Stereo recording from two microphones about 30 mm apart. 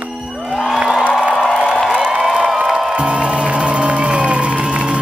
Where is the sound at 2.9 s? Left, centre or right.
Right.